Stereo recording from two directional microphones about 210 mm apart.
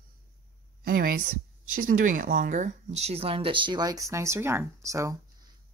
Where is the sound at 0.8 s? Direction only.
45° right (ahead or behind); by 5.2 s 15° right (ahead or behind).